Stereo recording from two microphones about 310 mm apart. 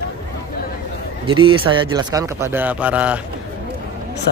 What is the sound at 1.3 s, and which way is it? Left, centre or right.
Speech, centre.